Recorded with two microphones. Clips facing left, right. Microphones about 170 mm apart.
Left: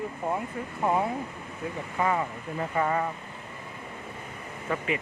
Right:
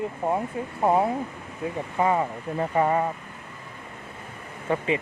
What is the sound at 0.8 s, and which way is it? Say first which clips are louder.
Speech: right 5 dB; 35° right (ahead or behind).